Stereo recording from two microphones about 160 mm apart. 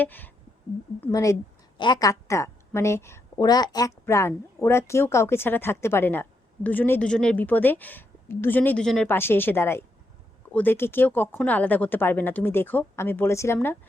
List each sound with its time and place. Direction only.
0.0 s a woman's voice: 10° left (ahead or behind)